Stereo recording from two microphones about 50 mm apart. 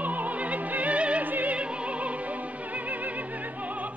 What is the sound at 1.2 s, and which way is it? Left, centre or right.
Opera, right.